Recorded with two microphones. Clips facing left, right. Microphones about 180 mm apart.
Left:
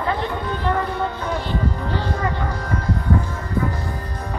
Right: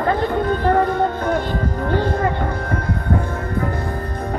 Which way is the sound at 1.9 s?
50° right (ahead or behind).